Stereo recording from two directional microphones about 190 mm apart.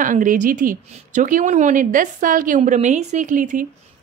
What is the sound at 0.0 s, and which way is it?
A woman's voice, 45° right (ahead or behind).